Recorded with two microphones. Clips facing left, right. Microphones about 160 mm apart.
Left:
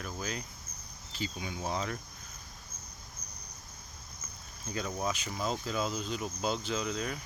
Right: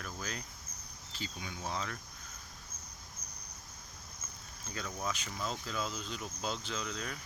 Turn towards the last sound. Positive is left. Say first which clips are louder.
# left 6 dB
turn(degrees=15)  # may be behind; listen again after turning